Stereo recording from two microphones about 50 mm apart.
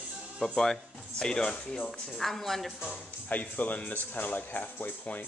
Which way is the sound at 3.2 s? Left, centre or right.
Left.